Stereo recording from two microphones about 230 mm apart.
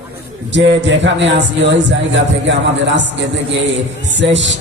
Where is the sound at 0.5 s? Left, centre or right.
Right.